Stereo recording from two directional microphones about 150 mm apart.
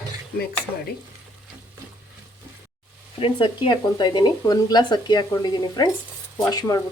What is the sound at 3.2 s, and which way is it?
Speech, 35° left (ahead or behind).